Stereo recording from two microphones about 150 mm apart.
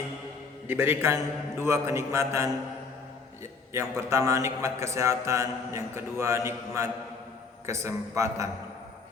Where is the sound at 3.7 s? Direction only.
20° right (ahead or behind).